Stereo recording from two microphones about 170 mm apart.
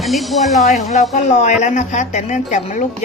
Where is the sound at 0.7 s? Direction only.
40° left (ahead or behind).